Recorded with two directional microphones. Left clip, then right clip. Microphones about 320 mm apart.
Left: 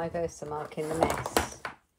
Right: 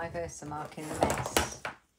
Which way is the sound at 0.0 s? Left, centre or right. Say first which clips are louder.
Left 5 dB; left.